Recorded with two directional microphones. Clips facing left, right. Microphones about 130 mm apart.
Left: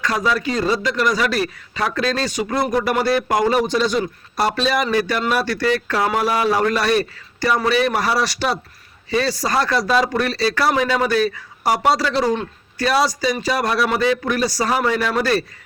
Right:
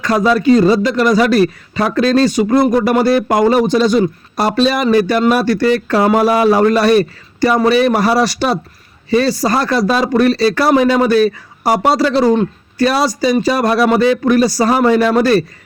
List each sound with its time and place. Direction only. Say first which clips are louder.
0.0 s speech: right 8 dB; 35° right (ahead or behind)